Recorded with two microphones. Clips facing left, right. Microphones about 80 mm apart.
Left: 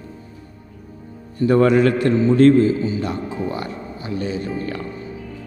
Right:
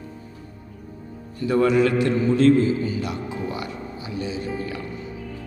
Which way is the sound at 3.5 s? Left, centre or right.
Left.